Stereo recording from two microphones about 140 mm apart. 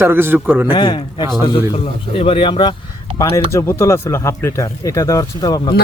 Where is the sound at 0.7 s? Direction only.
30° left (ahead or behind).